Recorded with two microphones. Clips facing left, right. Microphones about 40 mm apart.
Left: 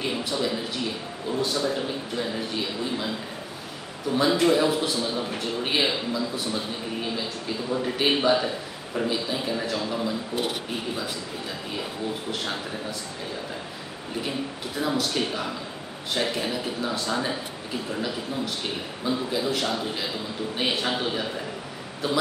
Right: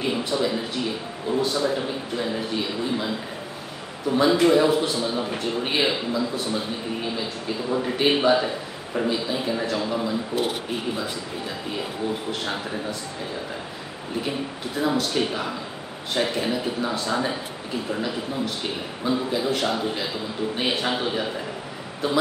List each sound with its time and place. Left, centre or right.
0.0 s a man's voice: centre
14.8 s a man's voice: centre